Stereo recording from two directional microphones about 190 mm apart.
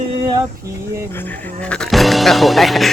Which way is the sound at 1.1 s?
10° left (ahead or behind).